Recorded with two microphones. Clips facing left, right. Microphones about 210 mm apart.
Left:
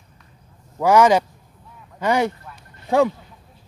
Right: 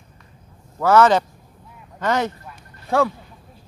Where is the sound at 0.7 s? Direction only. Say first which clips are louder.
Even; 15° left (ahead or behind).